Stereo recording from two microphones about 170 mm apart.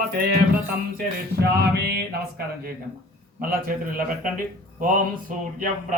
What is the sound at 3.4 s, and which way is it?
A man's voice, 55° right (ahead or behind).